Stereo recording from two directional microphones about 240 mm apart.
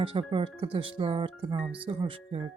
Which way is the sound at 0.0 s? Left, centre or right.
Right.